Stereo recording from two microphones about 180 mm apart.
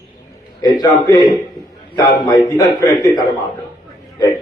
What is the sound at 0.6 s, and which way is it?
A man's voice, 20° left (ahead or behind).